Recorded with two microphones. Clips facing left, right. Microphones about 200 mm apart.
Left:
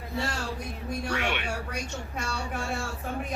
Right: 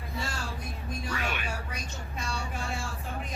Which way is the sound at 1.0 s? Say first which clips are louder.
Left 4 dB; 70° left (ahead or behind).